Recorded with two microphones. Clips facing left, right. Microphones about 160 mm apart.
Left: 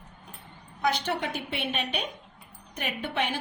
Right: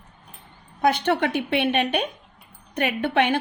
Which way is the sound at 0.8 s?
60° right (ahead or behind).